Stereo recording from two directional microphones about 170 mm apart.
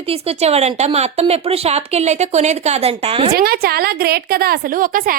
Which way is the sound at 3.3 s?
65° right (ahead or behind).